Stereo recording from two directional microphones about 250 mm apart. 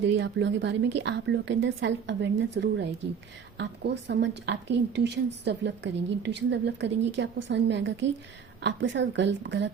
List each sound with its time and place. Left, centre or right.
0.0 s a woman's voice: right